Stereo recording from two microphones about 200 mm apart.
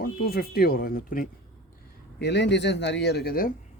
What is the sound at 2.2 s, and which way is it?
Speech, 60° left (ahead or behind).